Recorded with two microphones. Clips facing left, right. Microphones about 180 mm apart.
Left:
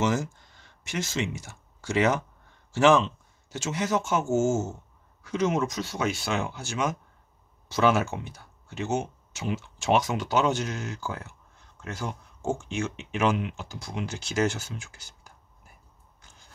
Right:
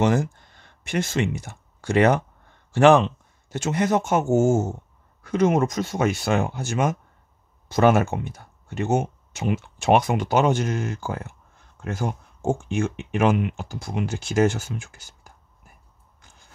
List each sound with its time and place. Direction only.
0.0 s a man's voice: 60° right (ahead or behind)